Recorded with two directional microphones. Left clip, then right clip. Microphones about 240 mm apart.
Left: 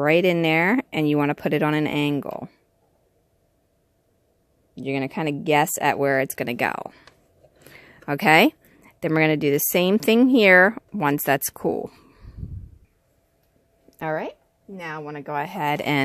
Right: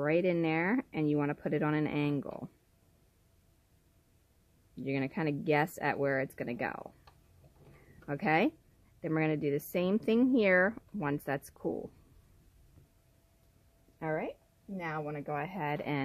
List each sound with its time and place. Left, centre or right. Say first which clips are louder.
0.0 s speech: left 11 dB; left
4.7 s speech: left 9 dB; left
8.1 s speech: left 13 dB; left
13.9 s speech: left 9 dB; left
14.8 s speech: left 5 dB; left